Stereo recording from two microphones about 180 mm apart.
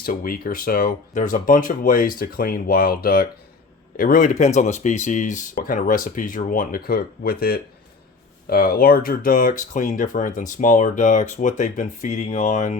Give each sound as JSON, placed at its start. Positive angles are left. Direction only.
{"t": 0.0, "sound": "speech", "side_deg": 55}